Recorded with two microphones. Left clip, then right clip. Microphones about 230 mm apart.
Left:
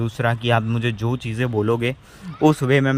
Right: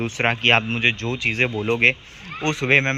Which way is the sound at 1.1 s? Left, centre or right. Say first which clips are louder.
Right 3 dB; left.